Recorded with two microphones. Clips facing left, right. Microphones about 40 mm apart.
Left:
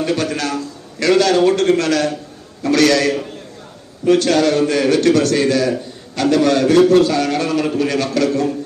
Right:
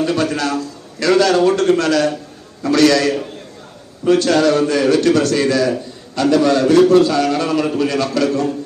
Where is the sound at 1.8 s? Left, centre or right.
Right.